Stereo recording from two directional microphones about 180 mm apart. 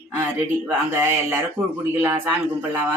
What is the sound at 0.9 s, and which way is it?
Speech, 10° right (ahead or behind).